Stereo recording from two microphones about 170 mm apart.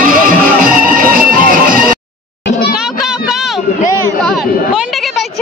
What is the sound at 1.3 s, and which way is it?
Music, 55° right (ahead or behind).